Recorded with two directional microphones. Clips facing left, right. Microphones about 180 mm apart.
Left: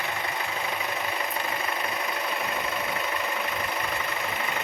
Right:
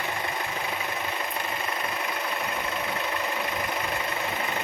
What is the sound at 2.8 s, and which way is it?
Vehicle, centre (ahead or behind).